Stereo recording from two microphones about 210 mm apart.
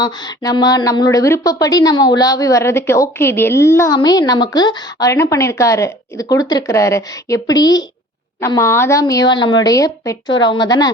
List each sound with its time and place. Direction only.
0.0 s a woman's voice: 20° left (ahead or behind)